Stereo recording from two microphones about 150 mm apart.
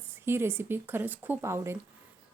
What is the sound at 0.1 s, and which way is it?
A woman's voice, 15° right (ahead or behind).